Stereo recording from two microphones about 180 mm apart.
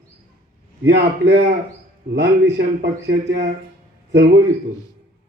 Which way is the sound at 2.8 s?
70° right (ahead or behind).